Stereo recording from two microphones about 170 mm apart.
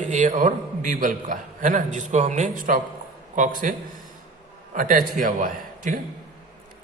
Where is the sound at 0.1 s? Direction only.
50° right (ahead or behind).